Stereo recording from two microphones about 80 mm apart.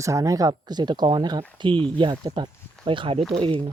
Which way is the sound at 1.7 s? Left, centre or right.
Centre.